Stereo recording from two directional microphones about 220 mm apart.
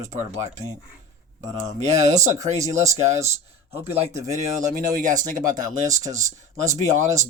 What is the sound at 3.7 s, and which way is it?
Speech, 25° right (ahead or behind).